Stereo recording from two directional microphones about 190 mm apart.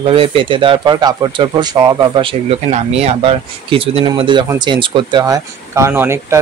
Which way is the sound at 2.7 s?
35° right (ahead or behind).